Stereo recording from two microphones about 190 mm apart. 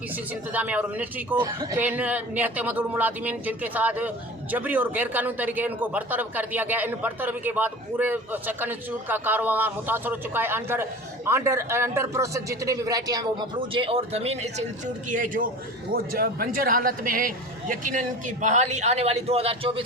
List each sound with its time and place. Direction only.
0.5 s a man's voice: 5° right (ahead or behind); by 14.5 s 30° right (ahead or behind)
15.1 s a man's voice: 45° right (ahead or behind)